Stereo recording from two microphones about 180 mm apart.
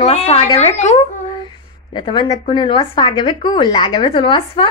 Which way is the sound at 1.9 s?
25° left (ahead or behind).